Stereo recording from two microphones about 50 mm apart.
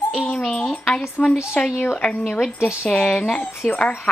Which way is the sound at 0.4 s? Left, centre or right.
Centre.